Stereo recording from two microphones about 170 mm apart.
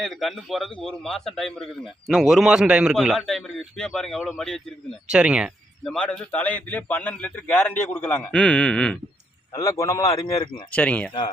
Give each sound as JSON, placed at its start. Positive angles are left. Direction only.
{"t": 0.0, "sound": "a man's voice", "side_deg": 0}
{"t": 5.8, "sound": "a man's voice", "side_deg": 5}
{"t": 9.5, "sound": "speech", "side_deg": 20}
{"t": 10.7, "sound": "a man's voice", "side_deg": 5}